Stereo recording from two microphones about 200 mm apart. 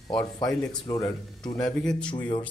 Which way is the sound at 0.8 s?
20° left (ahead or behind).